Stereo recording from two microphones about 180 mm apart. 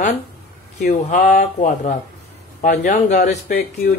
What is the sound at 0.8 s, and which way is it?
Speech, 45° left (ahead or behind).